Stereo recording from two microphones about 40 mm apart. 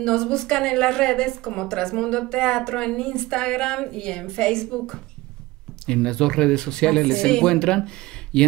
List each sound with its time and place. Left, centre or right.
0.0 s a woman's voice: left